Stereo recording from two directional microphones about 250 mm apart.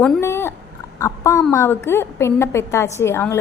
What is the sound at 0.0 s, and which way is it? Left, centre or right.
A woman's voice, centre.